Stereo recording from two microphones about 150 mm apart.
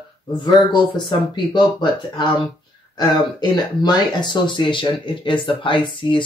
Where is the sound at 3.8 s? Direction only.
30° left (ahead or behind).